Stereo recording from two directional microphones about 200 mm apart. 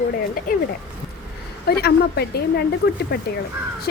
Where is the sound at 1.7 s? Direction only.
55° left (ahead or behind).